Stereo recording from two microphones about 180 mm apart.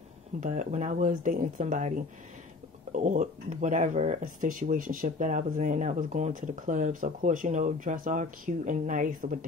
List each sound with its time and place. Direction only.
0.4 s speech: 45° right (ahead or behind)